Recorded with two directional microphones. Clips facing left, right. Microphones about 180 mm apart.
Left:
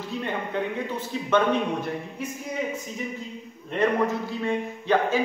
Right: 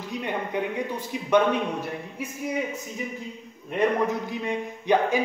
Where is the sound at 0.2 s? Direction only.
15° right (ahead or behind).